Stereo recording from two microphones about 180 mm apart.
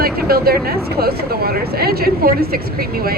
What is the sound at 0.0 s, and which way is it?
Speech, 55° right (ahead or behind).